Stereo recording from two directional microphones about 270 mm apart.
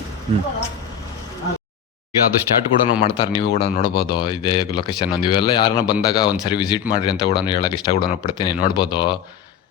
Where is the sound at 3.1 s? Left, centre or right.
Centre.